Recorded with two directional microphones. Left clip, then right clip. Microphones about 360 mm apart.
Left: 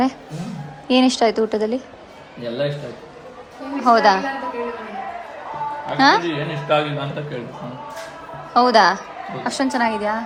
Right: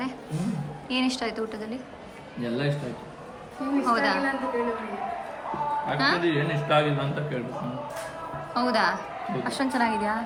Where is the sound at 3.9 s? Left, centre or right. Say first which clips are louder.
Left 11 dB; centre.